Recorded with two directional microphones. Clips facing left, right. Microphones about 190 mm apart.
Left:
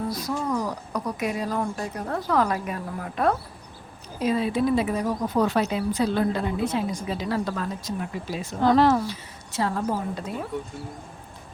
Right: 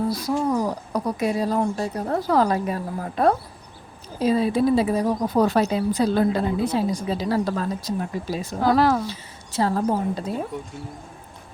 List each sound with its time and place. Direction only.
0.1 s speech: 30° right (ahead or behind)
8.6 s speech: 5° right (ahead or behind)
9.0 s speech: 35° right (ahead or behind)